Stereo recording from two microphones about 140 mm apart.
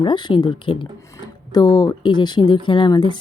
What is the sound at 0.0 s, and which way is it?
A woman's voice, 35° left (ahead or behind).